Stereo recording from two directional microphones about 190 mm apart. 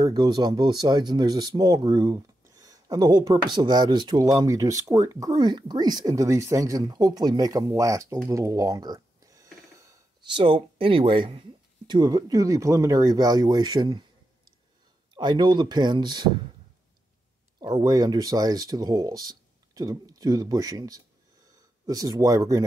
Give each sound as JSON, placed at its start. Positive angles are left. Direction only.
{"t": 0.0, "sound": "speech", "side_deg": -20}
{"t": 8.3, "sound": "a sound", "side_deg": -15}
{"t": 11.9, "sound": "speech", "side_deg": -20}
{"t": 17.6, "sound": "speech", "side_deg": -20}